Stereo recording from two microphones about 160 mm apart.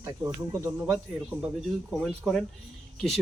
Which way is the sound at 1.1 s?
Centre (ahead or behind).